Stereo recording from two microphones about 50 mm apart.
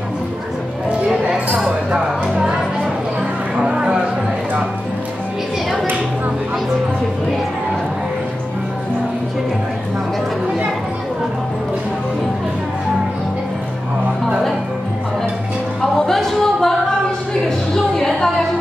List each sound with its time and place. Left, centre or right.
3.5 s a sound: centre
15.8 s music: centre
17.9 s music: centre